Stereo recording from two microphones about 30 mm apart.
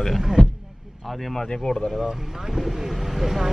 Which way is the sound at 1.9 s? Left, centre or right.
Centre.